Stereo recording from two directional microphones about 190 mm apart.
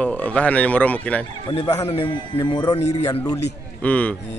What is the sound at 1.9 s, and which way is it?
Speech, 30° left (ahead or behind).